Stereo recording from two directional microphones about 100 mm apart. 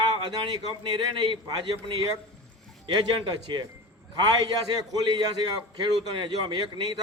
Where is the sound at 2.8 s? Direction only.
55° right (ahead or behind).